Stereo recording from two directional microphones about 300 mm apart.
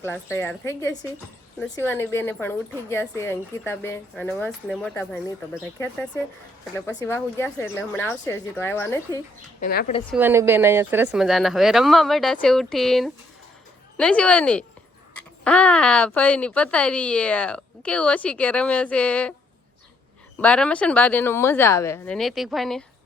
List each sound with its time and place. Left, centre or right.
0.0 s a woman's voice: centre
6.7 s a woman's voice: centre
9.6 s a woman's voice: left
10.1 s speech: centre
20.4 s speech: centre